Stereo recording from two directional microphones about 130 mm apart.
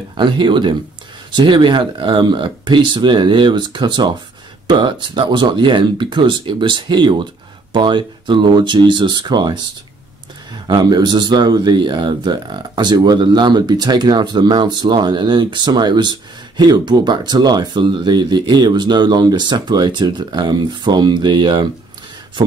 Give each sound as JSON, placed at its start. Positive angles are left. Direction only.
{"t": 0.1, "sound": "speech", "side_deg": -40}
{"t": 10.7, "sound": "speech", "side_deg": -35}